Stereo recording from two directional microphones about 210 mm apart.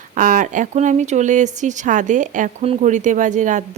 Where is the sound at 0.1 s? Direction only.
40° right (ahead or behind).